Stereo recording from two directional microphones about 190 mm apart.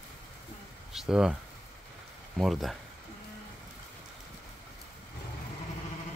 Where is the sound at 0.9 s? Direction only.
Centre (ahead or behind).